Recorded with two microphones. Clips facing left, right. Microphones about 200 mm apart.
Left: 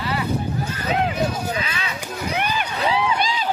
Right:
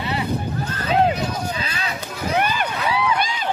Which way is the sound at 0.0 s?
25° right (ahead or behind).